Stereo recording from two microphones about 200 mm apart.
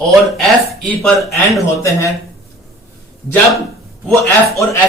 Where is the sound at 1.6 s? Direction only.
15° left (ahead or behind).